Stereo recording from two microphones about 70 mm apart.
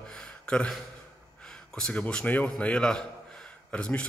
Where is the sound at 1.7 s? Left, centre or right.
Centre.